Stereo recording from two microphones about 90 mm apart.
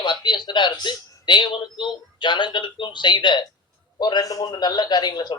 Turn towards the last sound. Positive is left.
turn(degrees=50)  # may be behind; listen again after turning